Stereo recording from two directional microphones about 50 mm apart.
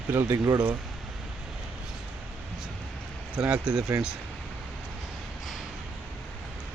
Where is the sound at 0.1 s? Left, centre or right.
Right.